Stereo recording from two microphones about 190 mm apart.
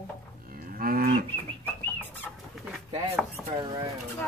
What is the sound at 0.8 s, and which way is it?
Livestock, 50° right (ahead or behind).